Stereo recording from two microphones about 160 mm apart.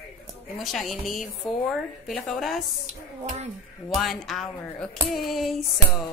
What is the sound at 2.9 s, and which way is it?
Speech, 45° right (ahead or behind).